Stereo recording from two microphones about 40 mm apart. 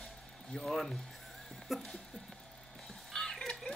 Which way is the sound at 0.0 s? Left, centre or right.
Centre.